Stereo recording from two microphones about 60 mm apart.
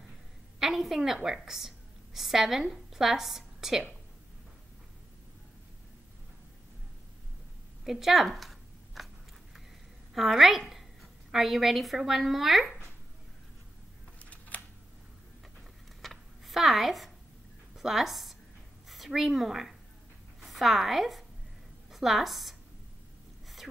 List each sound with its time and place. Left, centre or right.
0.6 s a woman's voice: centre
7.8 s chewing: centre
10.1 s a woman's voice: centre
14.5 s camera: left
16.0 s a sound: centre
17.7 s a woman's voice: centre